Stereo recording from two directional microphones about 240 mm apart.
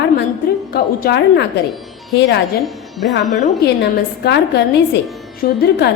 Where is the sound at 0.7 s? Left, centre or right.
Left.